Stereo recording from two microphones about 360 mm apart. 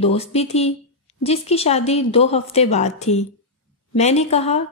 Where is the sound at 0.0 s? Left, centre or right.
Centre.